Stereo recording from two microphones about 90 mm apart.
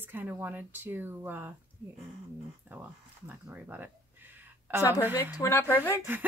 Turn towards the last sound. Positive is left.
turn(degrees=25)  # may be behind; listen again after turning